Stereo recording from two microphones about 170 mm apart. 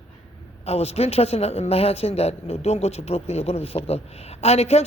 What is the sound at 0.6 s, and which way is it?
Speech, 35° left (ahead or behind).